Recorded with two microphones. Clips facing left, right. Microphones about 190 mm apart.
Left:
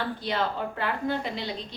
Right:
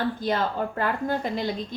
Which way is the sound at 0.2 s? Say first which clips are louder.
Right 3 dB; 45° right (ahead or behind).